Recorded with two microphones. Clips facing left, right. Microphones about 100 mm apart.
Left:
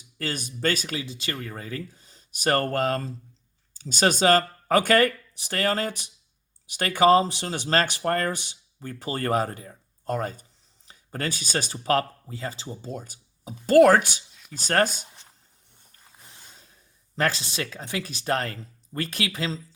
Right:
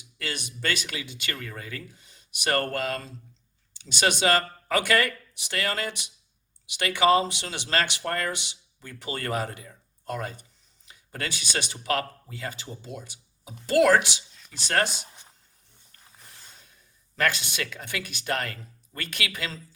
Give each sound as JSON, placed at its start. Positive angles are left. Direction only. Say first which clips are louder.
{"t": 0.2, "sound": "speech", "louder": "left 5 dB", "side_deg": 40}
{"t": 15.0, "sound": "a sound", "louder": "right 1 dB", "side_deg": -15}
{"t": 16.6, "sound": "speech", "louder": "left 1 dB", "side_deg": 35}